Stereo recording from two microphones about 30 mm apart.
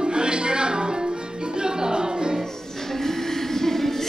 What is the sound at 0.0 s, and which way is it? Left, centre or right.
Music, right.